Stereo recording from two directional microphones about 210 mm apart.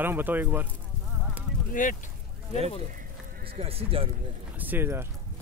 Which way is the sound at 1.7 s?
40° left (ahead or behind).